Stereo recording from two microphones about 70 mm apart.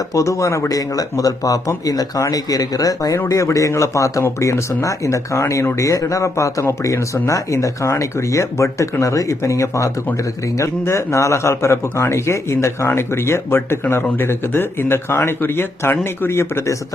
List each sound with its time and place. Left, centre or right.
0.1 s speech: left
13.8 s speech: left